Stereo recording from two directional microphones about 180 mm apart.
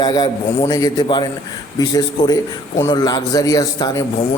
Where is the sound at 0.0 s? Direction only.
25° left (ahead or behind).